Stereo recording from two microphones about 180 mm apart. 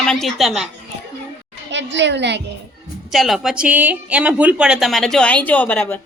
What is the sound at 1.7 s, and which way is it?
Speech, 80° right.